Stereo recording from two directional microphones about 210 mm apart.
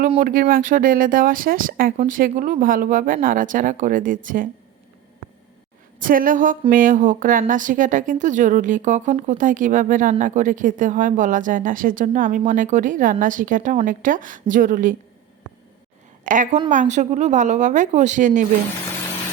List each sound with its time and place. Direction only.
0.2 s speech: 40° right (ahead or behind)
6.0 s speech: 40° right (ahead or behind)
16.2 s speech: 35° right (ahead or behind)